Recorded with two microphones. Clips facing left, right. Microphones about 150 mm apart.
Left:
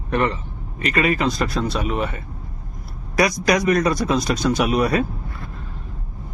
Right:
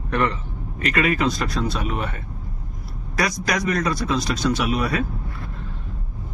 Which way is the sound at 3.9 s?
50° left (ahead or behind).